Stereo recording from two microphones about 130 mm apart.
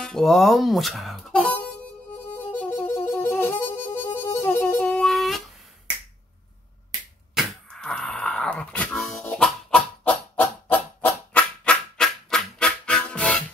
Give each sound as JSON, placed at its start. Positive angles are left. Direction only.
{"t": 0.0, "sound": "speech", "side_deg": 5}
{"t": 2.2, "sound": "harmonica", "side_deg": 15}
{"t": 7.3, "sound": "a sound", "side_deg": 5}